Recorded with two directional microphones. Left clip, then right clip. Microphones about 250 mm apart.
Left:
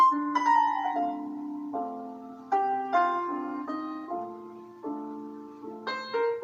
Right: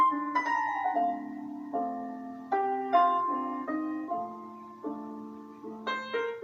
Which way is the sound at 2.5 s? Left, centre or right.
Right.